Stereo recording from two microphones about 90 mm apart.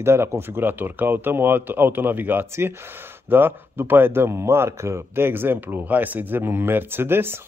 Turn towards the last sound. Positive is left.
turn(degrees=-25)  # may be behind; listen again after turning